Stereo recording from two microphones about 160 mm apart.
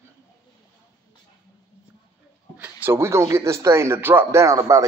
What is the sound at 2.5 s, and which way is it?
Speech, 15° right (ahead or behind).